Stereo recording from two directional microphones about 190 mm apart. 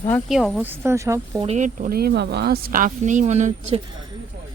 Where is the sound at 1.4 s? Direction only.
40° right (ahead or behind).